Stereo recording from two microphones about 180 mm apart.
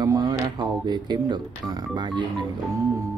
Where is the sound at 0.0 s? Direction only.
20° right (ahead or behind).